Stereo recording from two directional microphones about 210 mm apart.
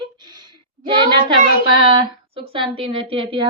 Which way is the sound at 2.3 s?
25° right (ahead or behind).